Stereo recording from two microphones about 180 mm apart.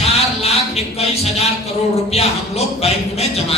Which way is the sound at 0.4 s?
35° left (ahead or behind).